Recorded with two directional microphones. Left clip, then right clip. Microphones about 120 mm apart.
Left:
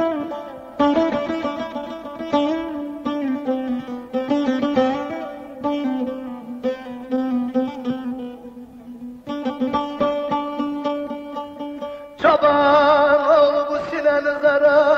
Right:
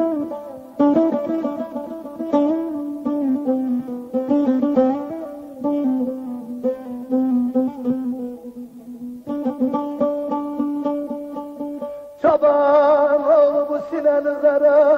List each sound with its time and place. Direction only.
0.7 s sitar: 20° left (ahead or behind)
6.6 s music: 25° left (ahead or behind)
9.3 s music: 25° left (ahead or behind)